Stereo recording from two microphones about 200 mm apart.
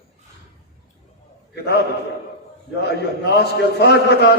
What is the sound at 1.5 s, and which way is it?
Speech, 55° left (ahead or behind).